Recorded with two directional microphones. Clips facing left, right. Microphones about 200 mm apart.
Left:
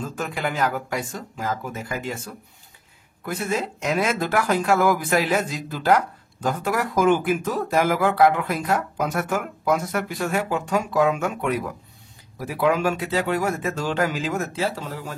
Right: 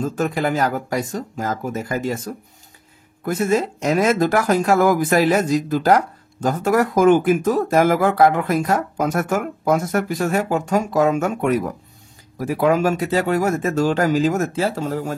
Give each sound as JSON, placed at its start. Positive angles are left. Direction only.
{"t": 0.0, "sound": "speech", "side_deg": -40}